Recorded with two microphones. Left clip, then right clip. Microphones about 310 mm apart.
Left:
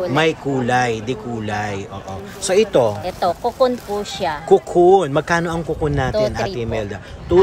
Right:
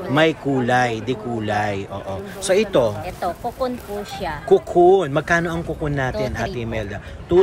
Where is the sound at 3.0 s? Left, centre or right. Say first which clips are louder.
Left 6 dB; left.